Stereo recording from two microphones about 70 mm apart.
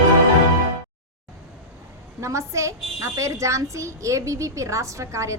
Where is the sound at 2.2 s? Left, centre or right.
Right.